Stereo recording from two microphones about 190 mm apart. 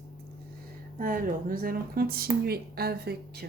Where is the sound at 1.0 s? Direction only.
45° right (ahead or behind).